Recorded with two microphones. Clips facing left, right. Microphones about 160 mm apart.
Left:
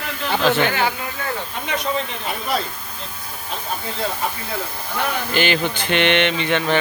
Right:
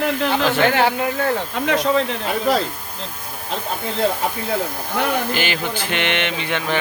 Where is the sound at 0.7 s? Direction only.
65° right (ahead or behind); by 1.9 s 90° right.